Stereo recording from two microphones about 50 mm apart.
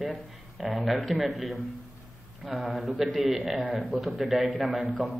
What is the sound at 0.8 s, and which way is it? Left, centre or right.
Speech, centre.